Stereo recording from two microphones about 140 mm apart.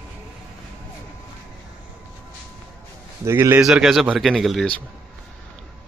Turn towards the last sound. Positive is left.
turn(degrees=0)  # may be behind; listen again after turning